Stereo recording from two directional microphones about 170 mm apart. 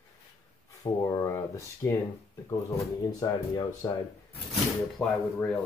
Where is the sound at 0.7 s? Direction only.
20° left (ahead or behind).